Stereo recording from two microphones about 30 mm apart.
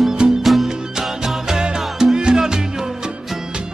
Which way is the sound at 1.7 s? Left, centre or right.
Centre.